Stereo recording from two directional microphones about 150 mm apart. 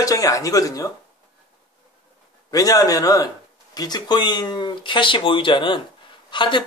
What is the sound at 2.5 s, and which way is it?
Speech, 25° left (ahead or behind).